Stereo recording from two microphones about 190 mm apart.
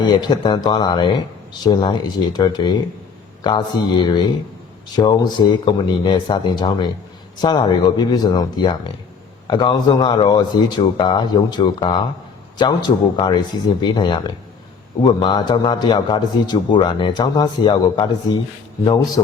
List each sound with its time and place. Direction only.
0.0 s a man's voice: 25° left (ahead or behind)